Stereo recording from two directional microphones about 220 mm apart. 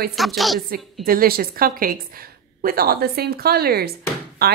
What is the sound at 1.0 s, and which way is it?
A woman's voice, 40° right (ahead or behind).